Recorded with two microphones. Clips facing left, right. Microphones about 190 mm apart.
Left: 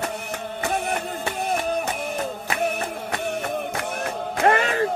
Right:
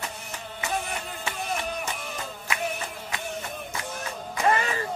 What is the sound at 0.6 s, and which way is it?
Music, 60° left (ahead or behind).